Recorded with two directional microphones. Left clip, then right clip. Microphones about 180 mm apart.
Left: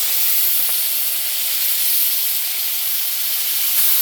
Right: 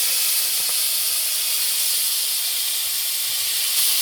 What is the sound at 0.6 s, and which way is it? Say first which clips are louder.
Sizzle: right 1 dB; 15° left (ahead or behind).